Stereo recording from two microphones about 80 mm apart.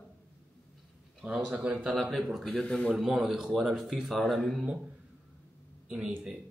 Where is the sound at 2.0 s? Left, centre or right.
Centre.